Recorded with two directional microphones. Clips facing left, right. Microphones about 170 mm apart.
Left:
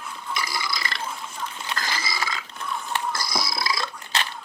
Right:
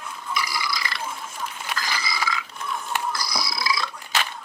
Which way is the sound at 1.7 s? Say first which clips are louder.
Right 1 dB; 25° left (ahead or behind).